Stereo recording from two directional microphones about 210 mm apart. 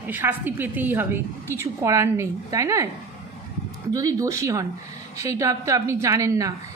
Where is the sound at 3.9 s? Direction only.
15° right (ahead or behind).